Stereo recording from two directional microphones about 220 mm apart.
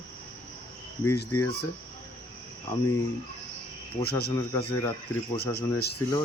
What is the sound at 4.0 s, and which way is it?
Speech, 45° left (ahead or behind).